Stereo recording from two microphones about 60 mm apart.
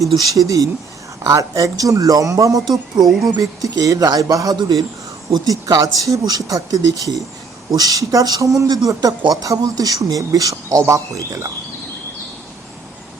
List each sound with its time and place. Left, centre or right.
0.0 s speech: right
3.2 s speech: right